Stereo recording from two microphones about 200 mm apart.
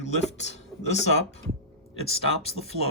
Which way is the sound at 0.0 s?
35° left (ahead or behind).